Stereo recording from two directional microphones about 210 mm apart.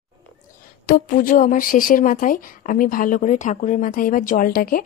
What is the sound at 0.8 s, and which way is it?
Speech, 45° left (ahead or behind).